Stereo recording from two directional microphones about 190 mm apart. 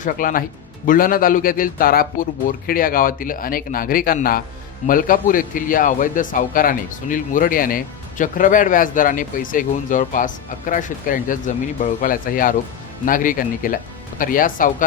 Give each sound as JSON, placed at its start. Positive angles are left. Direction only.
{"t": 0.0, "sound": "a man's voice", "side_deg": 45}